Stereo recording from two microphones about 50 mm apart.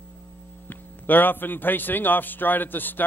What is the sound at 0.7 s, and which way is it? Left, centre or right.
A man's voice, left.